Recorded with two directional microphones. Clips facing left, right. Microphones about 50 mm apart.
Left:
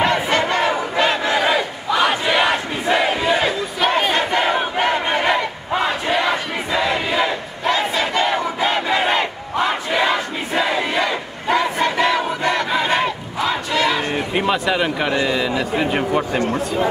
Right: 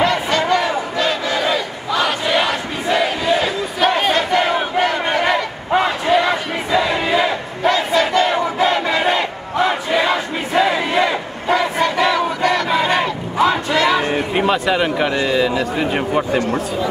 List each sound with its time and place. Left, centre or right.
0.0 s battle cry: left
2.4 s crowd: centre
4.8 s battle cry: centre
7.7 s battle cry: centre
9.7 s crowd: centre
12.6 s battle cry: centre
13.4 s battle cry: centre
13.7 s a sound: centre
15.1 s speech: centre